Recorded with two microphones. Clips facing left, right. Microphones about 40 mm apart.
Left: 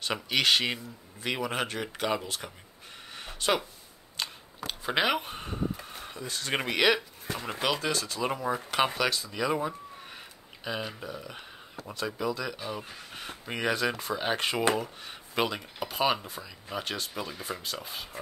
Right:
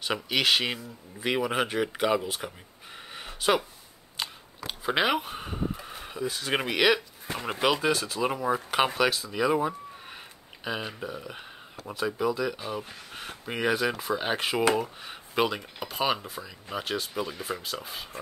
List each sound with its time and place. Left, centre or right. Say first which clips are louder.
0.0 s speech: right 1 dB; centre
3.1 s a sound: right 3 dB; centre
7.3 s speech: right 4 dB; centre